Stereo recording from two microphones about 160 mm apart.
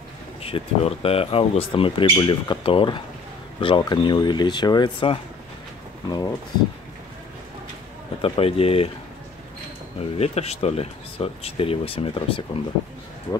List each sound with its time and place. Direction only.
0.4 s speech: 35° left (ahead or behind)
8.2 s speech: 35° left (ahead or behind)
9.9 s speech: 40° left (ahead or behind)